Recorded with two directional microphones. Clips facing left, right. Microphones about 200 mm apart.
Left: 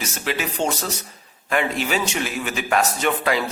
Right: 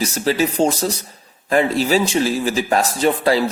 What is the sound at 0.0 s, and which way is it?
A man's voice, 35° right (ahead or behind).